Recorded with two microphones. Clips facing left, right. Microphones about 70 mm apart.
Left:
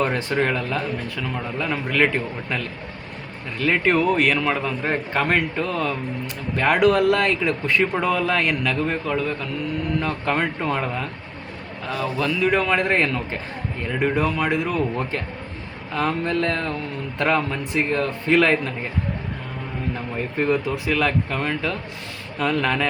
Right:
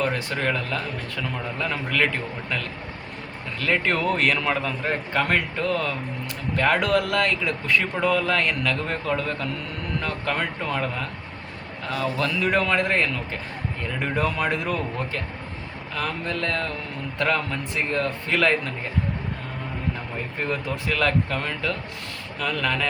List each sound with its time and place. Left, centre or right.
0.0 s speech: left
3.6 s speech: centre
4.6 s a man's voice: centre
10.0 s speech: left; by 12.7 s centre
12.7 s speech: left
14.0 s speech: centre
16.0 s speech: left
20.8 s a man's voice: centre